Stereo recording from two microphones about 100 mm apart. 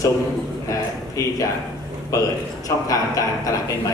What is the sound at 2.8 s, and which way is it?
Speech, 35° left (ahead or behind).